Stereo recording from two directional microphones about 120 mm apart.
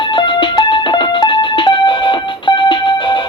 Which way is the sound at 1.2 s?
40° left (ahead or behind).